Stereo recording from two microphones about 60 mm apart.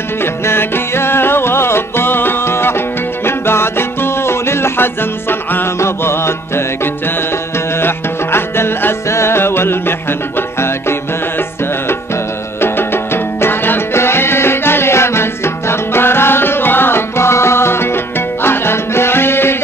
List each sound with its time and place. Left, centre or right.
0.2 s music: left
12.5 s music: left